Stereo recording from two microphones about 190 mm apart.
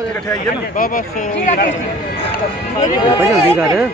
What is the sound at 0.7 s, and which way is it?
Speech, 45° left (ahead or behind).